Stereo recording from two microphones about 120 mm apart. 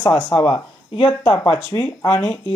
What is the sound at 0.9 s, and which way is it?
Speech, 45° left (ahead or behind).